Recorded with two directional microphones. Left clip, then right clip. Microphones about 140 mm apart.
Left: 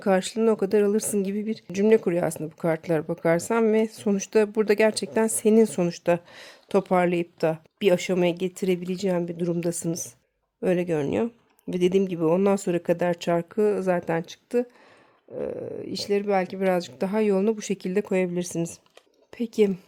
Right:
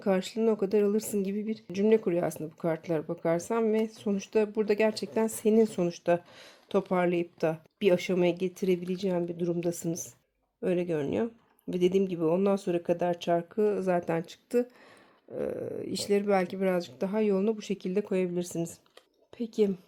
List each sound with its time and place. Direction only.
0.0 s speech: 40° left (ahead or behind)
19.3 s speech: 55° left (ahead or behind)